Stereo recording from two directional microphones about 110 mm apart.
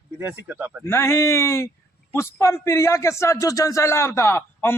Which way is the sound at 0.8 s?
25° left (ahead or behind).